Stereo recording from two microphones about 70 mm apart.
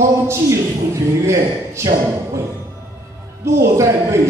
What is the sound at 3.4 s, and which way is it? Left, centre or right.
Speech, right.